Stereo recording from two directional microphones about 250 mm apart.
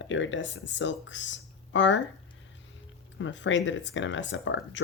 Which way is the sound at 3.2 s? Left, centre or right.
Left.